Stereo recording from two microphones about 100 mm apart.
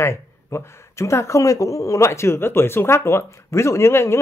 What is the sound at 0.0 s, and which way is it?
A man's voice, 25° left (ahead or behind).